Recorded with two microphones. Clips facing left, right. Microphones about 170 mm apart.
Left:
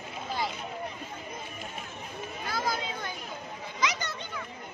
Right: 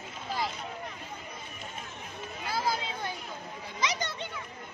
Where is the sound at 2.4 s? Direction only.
30° right (ahead or behind).